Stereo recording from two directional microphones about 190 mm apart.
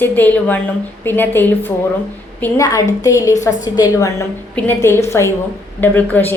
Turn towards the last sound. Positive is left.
turn(degrees=10)  # may be behind; listen again after turning